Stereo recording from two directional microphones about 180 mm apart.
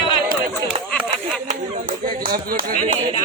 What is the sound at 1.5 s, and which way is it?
Speech, 45° right (ahead or behind).